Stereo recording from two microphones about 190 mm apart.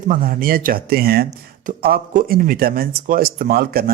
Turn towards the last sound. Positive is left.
turn(degrees=-55)  # may be behind; listen again after turning